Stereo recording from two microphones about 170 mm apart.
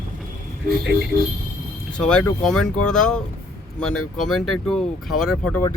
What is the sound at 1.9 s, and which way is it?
Speech, 5° left (ahead or behind).